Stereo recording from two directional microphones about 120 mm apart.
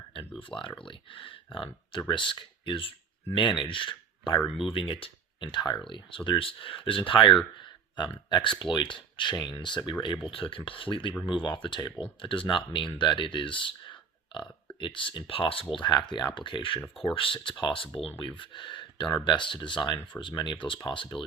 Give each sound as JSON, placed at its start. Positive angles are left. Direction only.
{"t": 0.1, "sound": "a sound", "side_deg": 45}
{"t": 0.9, "sound": "speech", "side_deg": 45}
{"t": 15.7, "sound": "speech", "side_deg": 40}